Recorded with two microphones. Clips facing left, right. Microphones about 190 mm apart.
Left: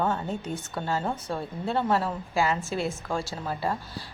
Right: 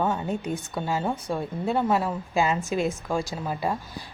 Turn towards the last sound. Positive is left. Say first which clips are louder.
# right 2 dB
turn(degrees=-15)  # may be behind; listen again after turning